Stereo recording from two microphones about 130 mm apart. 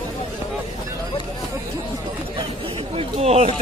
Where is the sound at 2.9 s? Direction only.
55° right (ahead or behind).